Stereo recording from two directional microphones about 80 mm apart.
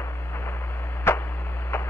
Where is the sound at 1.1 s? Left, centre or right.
Left.